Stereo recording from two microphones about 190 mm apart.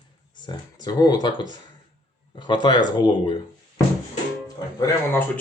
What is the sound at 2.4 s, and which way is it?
Speech, 25° left (ahead or behind).